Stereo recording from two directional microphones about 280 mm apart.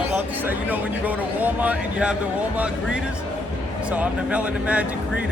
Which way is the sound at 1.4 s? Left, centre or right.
Centre.